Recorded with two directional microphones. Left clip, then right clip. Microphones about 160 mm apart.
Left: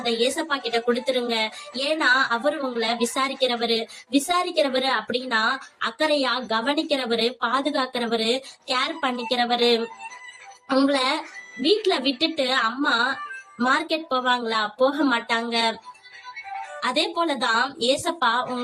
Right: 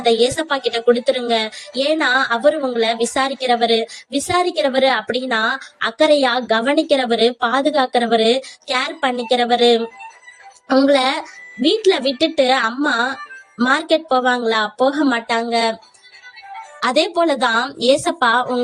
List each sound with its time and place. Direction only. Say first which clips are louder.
0.0 s a woman's voice: right 8 dB; 50° right (ahead or behind)
16.8 s a woman's voice: right 8 dB; 45° right (ahead or behind)